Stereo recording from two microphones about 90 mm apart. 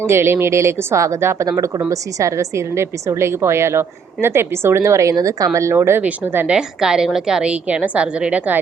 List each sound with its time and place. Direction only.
0.0 s a woman's voice: 30° right (ahead or behind); by 5.5 s 45° right (ahead or behind)
5.5 s a woman's voice: 30° right (ahead or behind)
6.6 s a woman's voice: 5° right (ahead or behind)